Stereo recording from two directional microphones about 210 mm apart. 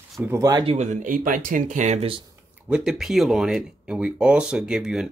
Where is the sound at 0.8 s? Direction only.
35° right (ahead or behind).